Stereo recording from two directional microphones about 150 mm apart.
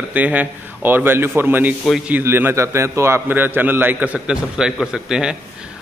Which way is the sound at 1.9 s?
Centre (ahead or behind).